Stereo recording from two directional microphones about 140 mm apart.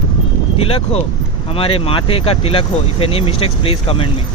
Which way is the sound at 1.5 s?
40° left (ahead or behind).